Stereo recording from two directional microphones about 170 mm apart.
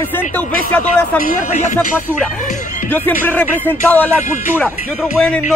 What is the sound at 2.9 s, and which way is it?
Speech, 10° left (ahead or behind).